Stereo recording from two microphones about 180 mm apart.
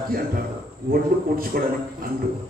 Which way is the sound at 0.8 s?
55° right (ahead or behind).